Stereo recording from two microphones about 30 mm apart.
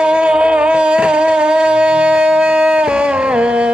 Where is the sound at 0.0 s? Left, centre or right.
Right.